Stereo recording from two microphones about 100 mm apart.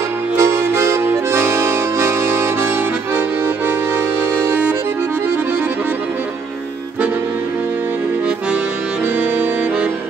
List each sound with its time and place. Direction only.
0.4 s accordion: 25° right (ahead or behind)
9.1 s accordion: 20° right (ahead or behind)